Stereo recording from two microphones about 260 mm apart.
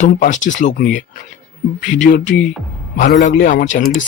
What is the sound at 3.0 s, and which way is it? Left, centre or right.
A man's voice, left.